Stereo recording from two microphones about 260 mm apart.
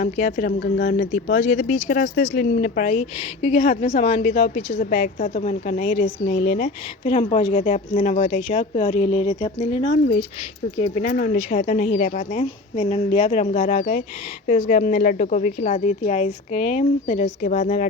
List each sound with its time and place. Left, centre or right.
0.0 s a woman's voice: left